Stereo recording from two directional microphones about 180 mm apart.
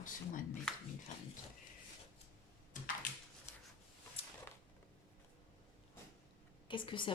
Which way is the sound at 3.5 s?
15° left (ahead or behind).